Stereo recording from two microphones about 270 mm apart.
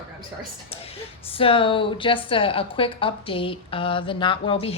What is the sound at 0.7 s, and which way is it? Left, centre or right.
Speech, left.